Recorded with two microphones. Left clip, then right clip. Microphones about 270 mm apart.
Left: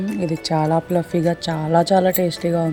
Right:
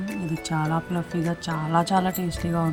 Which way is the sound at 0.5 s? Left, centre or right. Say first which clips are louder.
Left 8 dB; right.